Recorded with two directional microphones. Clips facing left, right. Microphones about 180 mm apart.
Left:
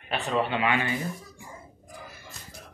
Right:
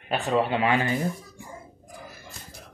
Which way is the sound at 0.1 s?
40° right (ahead or behind).